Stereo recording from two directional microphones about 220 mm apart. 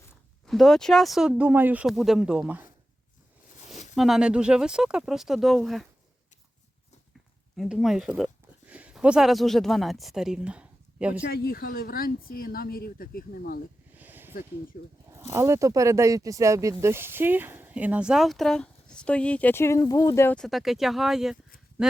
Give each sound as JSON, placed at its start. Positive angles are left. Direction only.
{"t": 0.4, "sound": "speech", "side_deg": 0}
{"t": 3.7, "sound": "speech", "side_deg": 0}
{"t": 7.5, "sound": "speech", "side_deg": 0}
{"t": 11.3, "sound": "speech", "side_deg": 45}
{"t": 13.9, "sound": "a sound", "side_deg": -10}
{"t": 14.7, "sound": "speech", "side_deg": 45}
{"t": 15.1, "sound": "speech", "side_deg": -10}